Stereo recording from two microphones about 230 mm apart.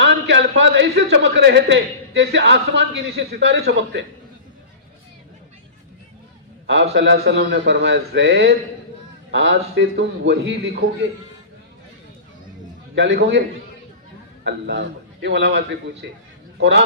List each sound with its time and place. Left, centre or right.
0.0 s a man's voice: right
6.9 s a man's voice: right
13.0 s a man's voice: right
14.4 s a man's voice: right